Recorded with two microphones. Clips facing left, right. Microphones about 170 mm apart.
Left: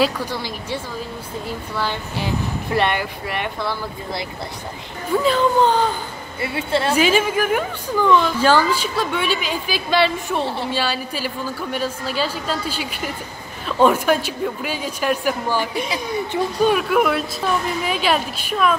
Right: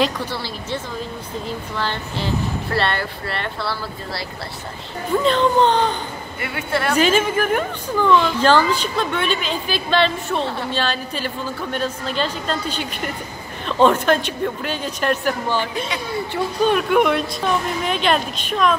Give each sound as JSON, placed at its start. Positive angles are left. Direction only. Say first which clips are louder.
{"t": 0.0, "sound": "a woman's voice", "louder": "left 1 dB", "side_deg": 15}
{"t": 1.8, "sound": "a woman's voice", "louder": "left 1 dB", "side_deg": 10}
{"t": 6.4, "sound": "a woman's voice", "louder": "left 2 dB", "side_deg": 25}
{"t": 7.0, "sound": "a woman's voice", "louder": "right 2 dB", "side_deg": 10}